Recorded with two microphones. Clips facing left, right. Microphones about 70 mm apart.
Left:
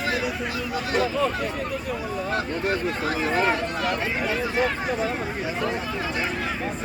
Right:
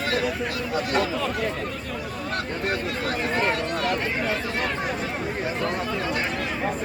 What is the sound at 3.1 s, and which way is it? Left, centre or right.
Speech, centre.